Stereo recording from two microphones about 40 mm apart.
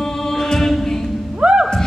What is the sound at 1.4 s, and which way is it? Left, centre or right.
Music, right.